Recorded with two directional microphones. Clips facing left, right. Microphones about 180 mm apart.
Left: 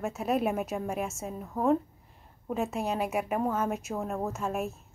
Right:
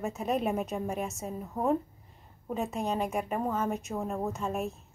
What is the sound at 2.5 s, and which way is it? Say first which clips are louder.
A woman's voice: left 1 dB; centre (ahead or behind).